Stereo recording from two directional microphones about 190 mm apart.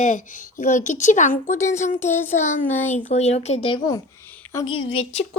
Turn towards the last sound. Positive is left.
turn(degrees=30)  # may be behind; listen again after turning